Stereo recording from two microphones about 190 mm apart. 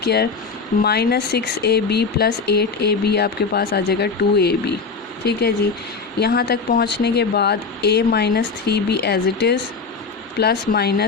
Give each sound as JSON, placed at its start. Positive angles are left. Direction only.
{"t": 0.0, "sound": "speech", "side_deg": 60}
{"t": 6.1, "sound": "speech", "side_deg": 55}